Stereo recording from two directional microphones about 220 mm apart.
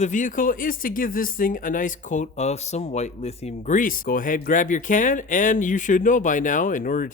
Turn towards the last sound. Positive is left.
turn(degrees=40)  # may be behind; listen again after turning